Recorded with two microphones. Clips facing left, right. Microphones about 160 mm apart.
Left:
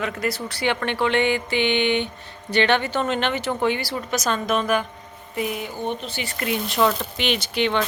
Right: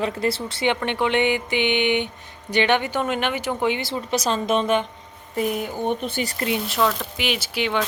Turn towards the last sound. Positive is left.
turn(degrees=-5)  # may be behind; listen again after turning